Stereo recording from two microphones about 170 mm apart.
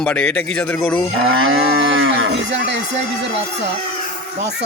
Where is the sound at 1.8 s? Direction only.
90° right.